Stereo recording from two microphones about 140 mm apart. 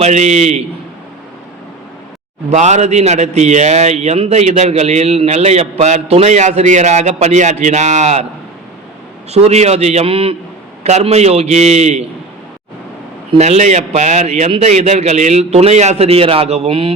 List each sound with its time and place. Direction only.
0.0 s a man's voice: 55° right (ahead or behind)
2.5 s a man's voice: 55° right (ahead or behind)
9.3 s a man's voice: 50° right (ahead or behind)
13.3 s a man's voice: 50° right (ahead or behind)